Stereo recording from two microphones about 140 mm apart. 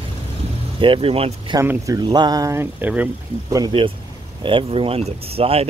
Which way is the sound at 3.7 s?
40° right (ahead or behind).